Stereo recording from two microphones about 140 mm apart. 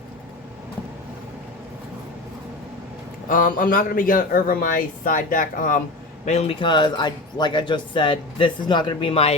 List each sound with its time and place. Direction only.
3.2 s speech: 75° left (ahead or behind)
6.2 s a man's voice: 50° left (ahead or behind)